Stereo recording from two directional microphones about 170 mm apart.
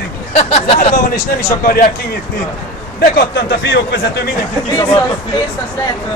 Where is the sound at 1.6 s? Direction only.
60° left (ahead or behind).